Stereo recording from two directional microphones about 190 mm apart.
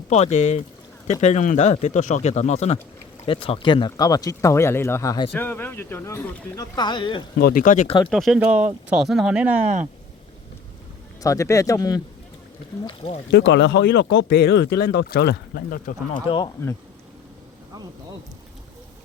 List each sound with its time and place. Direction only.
0.1 s speech: 40° left (ahead or behind)
7.3 s speech: 55° left (ahead or behind)
7.6 s speech: 40° left (ahead or behind)
8.1 s speech: centre (ahead or behind)
11.2 s speech: 15° left (ahead or behind)
13.3 s speech: 65° left (ahead or behind); by 16.2 s 50° left (ahead or behind)
16.2 s speech: 25° left (ahead or behind)